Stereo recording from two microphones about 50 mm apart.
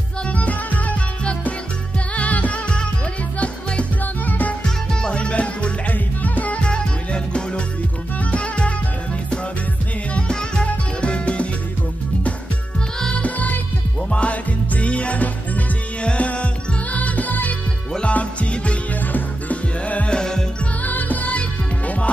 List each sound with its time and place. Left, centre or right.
0.3 s music: left
4.0 s music: left
4.6 s music: centre
6.6 s music: centre
10.1 s music: left
13.1 s music: left
20.2 s music: centre
20.8 s music: left